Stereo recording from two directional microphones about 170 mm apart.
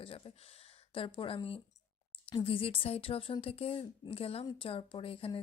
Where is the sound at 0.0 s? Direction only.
30° left (ahead or behind).